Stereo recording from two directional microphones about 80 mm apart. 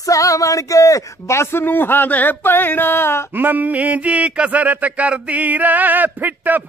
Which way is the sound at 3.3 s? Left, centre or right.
Right.